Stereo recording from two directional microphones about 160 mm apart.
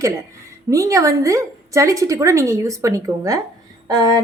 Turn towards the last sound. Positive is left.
turn(degrees=-25)  # may be behind; listen again after turning